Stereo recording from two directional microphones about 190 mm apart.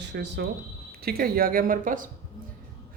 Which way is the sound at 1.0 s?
50° right (ahead or behind).